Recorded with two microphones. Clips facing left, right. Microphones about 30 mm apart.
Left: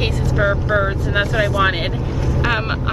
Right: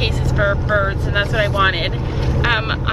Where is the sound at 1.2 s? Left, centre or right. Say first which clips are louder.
Even; right.